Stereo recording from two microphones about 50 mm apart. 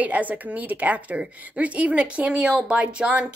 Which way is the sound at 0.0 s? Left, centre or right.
Right.